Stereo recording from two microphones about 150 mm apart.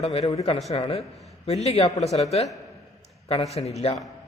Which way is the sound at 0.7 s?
40° left (ahead or behind).